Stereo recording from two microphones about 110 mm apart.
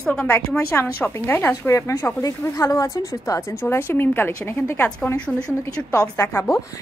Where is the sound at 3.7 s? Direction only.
20° left (ahead or behind).